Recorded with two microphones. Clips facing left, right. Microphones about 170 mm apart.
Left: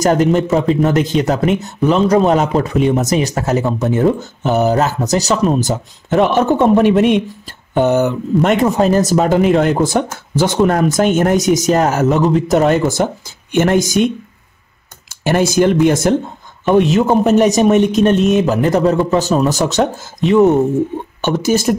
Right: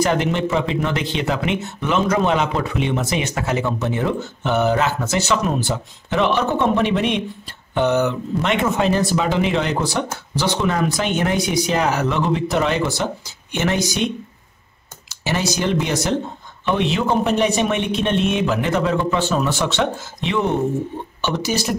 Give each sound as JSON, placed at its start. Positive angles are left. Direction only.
{"t": 0.0, "sound": "speech", "side_deg": 40}